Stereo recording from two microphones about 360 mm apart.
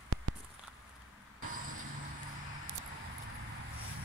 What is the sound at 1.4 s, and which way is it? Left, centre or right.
Vehicle, right.